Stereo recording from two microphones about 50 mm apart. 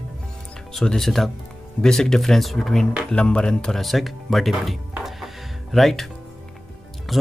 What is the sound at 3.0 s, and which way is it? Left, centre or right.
Speech, centre.